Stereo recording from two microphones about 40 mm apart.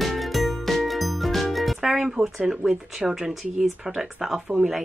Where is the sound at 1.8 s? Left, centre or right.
Centre.